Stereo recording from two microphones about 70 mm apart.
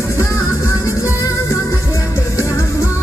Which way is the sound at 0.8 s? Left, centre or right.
Left.